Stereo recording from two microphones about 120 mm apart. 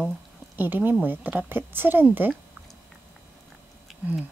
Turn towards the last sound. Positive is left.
turn(degrees=-15)  # may be behind; listen again after turning